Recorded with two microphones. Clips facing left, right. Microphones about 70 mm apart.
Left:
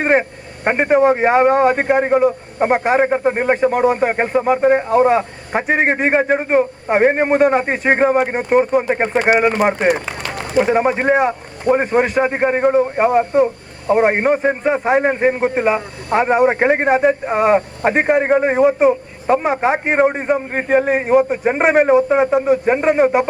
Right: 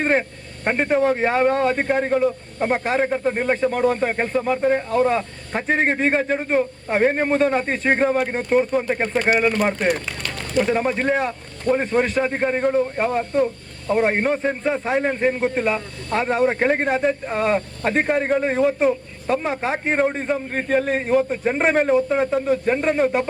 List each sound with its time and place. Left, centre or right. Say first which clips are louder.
0.0 s a man's voice: left 5 dB; left
3.0 s a man's voice: left 5 dB; left
9.1 s a man's voice: left 4 dB; centre
18.2 s a man's voice: left 6 dB; left
18.5 s a man's voice: left 5 dB; left
18.9 s a sound: left 6 dB; left
19.5 s a man's voice: left 6 dB; left